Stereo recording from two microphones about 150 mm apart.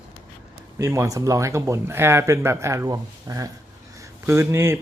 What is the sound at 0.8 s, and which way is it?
Speech, 20° right (ahead or behind).